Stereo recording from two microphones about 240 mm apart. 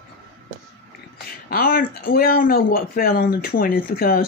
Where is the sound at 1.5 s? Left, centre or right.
Left.